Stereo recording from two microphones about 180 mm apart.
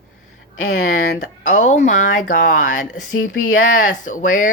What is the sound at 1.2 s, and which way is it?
Speech, 45° left (ahead or behind).